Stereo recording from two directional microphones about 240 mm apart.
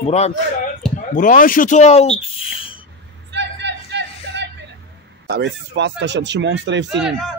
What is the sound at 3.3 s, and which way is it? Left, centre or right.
Vehicle, right.